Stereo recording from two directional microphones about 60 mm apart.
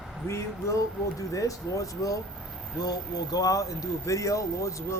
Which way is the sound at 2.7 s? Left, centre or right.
Left.